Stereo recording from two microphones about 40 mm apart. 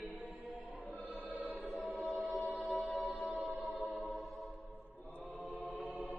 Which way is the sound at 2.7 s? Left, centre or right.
Left.